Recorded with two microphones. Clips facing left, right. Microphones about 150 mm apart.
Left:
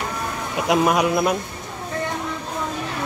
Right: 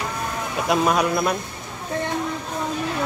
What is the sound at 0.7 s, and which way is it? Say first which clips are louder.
Speech: left 2 dB; 15° left (ahead or behind).